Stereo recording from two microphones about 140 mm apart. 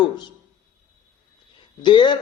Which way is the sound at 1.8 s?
35° left (ahead or behind).